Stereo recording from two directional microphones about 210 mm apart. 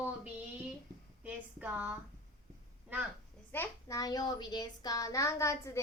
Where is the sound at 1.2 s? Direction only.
5° right (ahead or behind).